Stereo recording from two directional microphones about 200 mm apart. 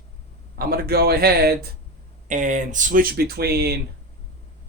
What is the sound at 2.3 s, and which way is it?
Speech, 40° right (ahead or behind).